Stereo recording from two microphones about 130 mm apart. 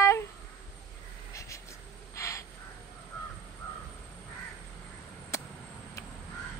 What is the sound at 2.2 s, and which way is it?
Crow, 20° left (ahead or behind).